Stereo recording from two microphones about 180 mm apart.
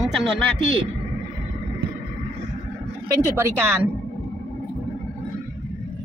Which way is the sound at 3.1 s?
15° right (ahead or behind).